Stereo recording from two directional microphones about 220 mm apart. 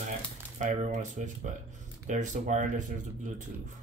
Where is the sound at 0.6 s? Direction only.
30° right (ahead or behind).